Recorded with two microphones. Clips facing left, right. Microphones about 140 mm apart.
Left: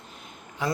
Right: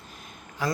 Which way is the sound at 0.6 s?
20° left (ahead or behind).